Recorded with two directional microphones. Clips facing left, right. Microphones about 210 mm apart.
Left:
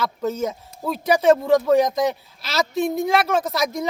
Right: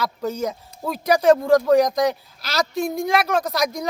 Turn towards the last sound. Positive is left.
turn(degrees=0)  # may be behind; listen again after turning